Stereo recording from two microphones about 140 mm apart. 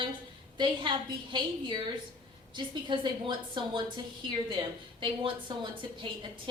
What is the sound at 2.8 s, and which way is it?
A woman's voice, 35° right (ahead or behind).